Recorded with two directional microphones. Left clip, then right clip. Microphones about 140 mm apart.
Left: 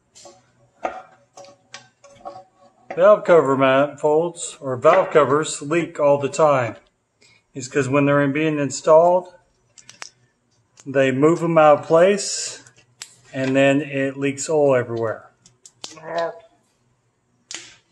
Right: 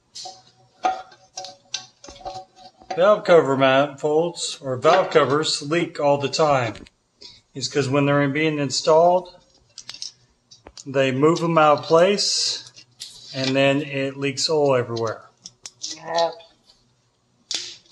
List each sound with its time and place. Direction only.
3.0 s a man's voice: 15° left (ahead or behind)
7.7 s a man's voice: 15° left (ahead or behind)
10.9 s a man's voice: 20° left (ahead or behind)
13.6 s a man's voice: 15° left (ahead or behind)